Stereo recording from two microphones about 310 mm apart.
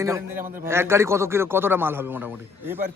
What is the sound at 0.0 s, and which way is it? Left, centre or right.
Speech, centre.